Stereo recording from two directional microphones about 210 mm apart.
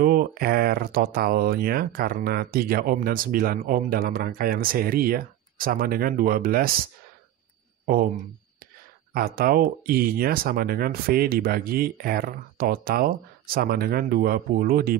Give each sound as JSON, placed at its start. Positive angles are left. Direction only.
{"t": 0.0, "sound": "speech", "side_deg": -45}
{"t": 7.8, "sound": "speech", "side_deg": -45}
{"t": 9.1, "sound": "speech", "side_deg": -45}